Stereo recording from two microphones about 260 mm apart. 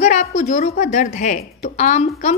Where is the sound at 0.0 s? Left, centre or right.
Left.